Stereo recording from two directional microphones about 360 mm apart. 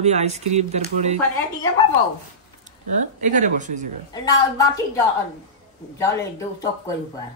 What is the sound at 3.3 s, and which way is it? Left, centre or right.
Speech, right.